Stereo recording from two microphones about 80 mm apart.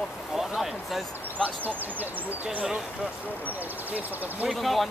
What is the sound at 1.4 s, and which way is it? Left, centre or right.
Speech, right.